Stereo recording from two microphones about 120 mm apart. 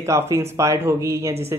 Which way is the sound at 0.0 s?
25° right (ahead or behind).